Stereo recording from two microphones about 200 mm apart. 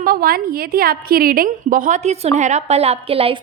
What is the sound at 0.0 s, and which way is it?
A woman's voice, 45° right (ahead or behind).